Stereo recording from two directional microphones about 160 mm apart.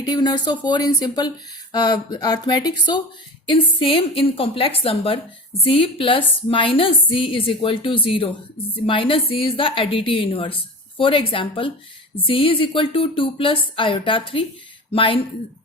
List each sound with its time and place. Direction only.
0.0 s a woman's voice: 25° left (ahead or behind)